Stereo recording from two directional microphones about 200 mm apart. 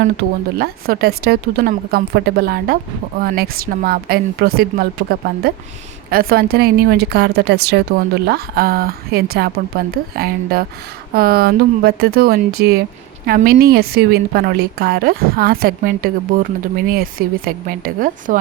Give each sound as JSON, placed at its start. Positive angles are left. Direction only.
{"t": 0.6, "sound": "a woman's voice", "side_deg": -50}